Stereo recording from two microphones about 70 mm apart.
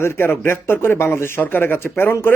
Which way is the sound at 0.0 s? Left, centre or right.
Left.